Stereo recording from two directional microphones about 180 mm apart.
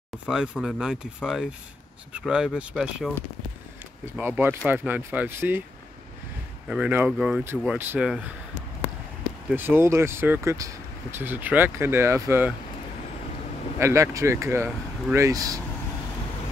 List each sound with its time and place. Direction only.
0.3 s speech: 5° right (ahead or behind)
4.2 s speech: 10° right (ahead or behind)
6.7 s speech: 10° right (ahead or behind)
9.5 s speech: 10° right (ahead or behind)
13.7 s speech: 15° right (ahead or behind)